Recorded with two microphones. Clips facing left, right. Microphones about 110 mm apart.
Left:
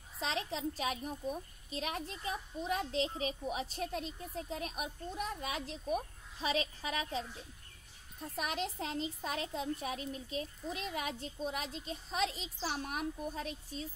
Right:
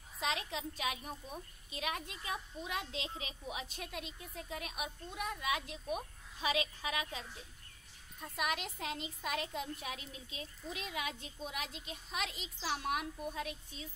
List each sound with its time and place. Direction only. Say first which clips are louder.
0.2 s a child's voice: left 2 dB; 35° left (ahead or behind)
8.4 s a child's voice: left 1 dB; 35° left (ahead or behind)